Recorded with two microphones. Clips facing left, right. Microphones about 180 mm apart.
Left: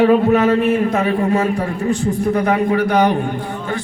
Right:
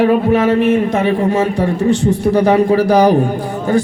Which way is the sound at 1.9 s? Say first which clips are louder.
Right 3 dB; 85° right.